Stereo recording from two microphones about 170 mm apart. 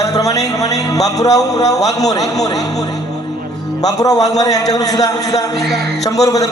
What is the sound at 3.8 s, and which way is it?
A man's voice, 20° left (ahead or behind).